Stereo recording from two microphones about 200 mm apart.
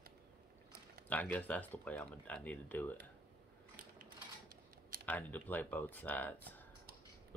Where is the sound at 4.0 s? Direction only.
45° right (ahead or behind).